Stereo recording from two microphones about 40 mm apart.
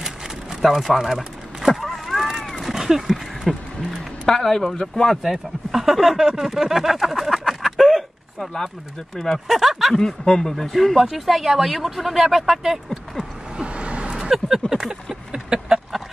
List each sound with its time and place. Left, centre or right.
0.6 s speech: centre
1.8 s a sound: centre
4.3 s speech: centre
9.2 s speech: centre
9.9 s speech: centre
10.5 s speech: centre
13.2 s vehicle: right
14.1 s vehicle: centre
14.7 s a sound: centre